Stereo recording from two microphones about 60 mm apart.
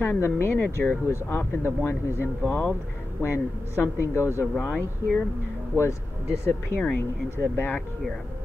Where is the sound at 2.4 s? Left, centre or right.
Left.